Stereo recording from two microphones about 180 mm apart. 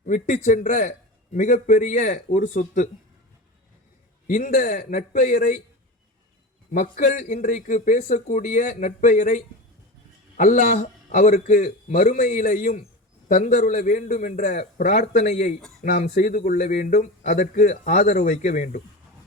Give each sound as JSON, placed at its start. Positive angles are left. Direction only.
{"t": 0.0, "sound": "a man's voice", "side_deg": 40}
{"t": 4.3, "sound": "a man's voice", "side_deg": 45}
{"t": 6.7, "sound": "a man's voice", "side_deg": 50}
{"t": 16.0, "sound": "speech", "side_deg": 50}